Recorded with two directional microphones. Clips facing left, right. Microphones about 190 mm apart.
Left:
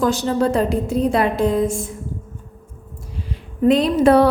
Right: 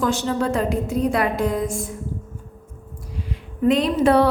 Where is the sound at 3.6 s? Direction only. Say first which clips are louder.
Left 3 dB; 35° left (ahead or behind).